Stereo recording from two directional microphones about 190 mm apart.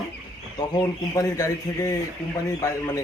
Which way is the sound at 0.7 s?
20° left (ahead or behind).